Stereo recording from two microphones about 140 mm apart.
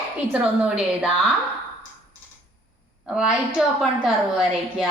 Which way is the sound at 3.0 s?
5° right (ahead or behind).